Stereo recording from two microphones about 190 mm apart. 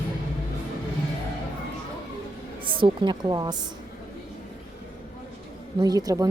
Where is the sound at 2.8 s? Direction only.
25° right (ahead or behind).